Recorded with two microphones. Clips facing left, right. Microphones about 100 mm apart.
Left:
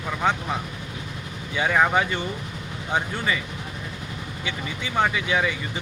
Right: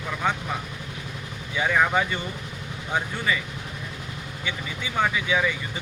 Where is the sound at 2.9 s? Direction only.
Centre (ahead or behind).